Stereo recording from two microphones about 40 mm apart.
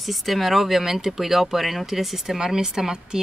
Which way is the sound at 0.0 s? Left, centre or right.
Centre.